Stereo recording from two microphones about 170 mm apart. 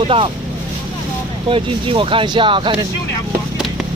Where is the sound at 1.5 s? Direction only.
30° right (ahead or behind).